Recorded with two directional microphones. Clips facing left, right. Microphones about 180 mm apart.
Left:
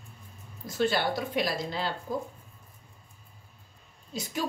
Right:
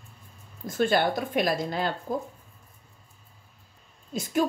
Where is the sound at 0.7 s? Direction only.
50° right (ahead or behind).